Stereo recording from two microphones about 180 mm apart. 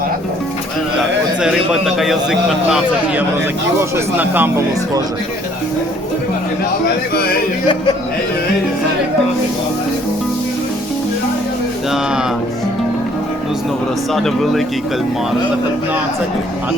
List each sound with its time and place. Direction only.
1.4 s a man's voice: 5° right (ahead or behind)
6.8 s speech: 60° left (ahead or behind)
14.1 s a man's voice: centre (ahead or behind)